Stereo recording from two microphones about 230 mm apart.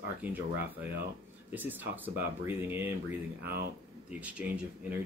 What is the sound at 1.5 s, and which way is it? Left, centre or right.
Speech, centre.